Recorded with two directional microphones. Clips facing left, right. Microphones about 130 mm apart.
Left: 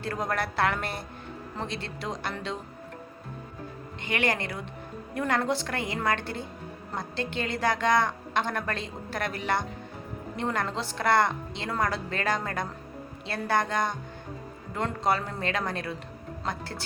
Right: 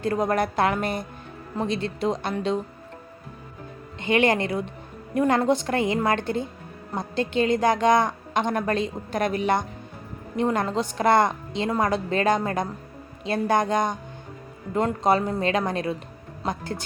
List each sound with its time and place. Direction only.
0.0 s a woman's voice: 20° right (ahead or behind)
4.0 s a woman's voice: 20° right (ahead or behind)